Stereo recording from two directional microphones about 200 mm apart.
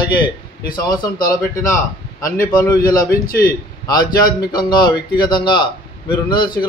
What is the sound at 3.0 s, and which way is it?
Speech, 45° left (ahead or behind).